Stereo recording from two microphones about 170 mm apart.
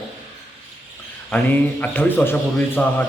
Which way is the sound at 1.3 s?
10° left (ahead or behind).